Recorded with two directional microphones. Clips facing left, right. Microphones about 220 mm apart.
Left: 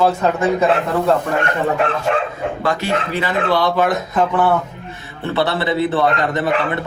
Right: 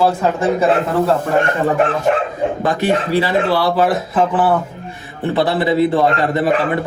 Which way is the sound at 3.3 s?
5° right (ahead or behind).